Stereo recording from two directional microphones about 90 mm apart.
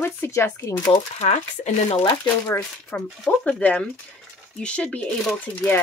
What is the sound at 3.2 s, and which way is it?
Speech, 10° left (ahead or behind).